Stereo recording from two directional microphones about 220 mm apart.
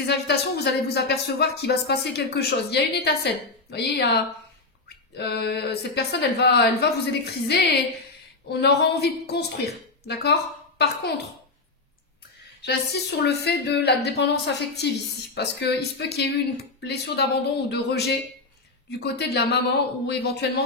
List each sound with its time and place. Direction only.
0.0 s a woman's voice: 50° left (ahead or behind)
12.6 s speech: 50° left (ahead or behind)